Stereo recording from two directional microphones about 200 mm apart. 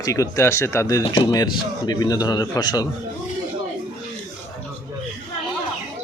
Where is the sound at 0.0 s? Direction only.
15° left (ahead or behind).